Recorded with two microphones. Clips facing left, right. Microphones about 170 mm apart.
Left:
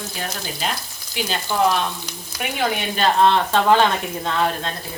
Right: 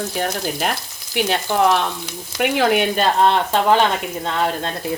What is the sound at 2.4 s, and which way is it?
Frying, 75° right (ahead or behind).